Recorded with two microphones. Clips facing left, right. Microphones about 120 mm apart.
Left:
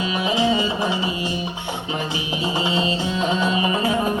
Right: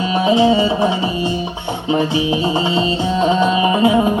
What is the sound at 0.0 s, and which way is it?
Music, 30° right (ahead or behind).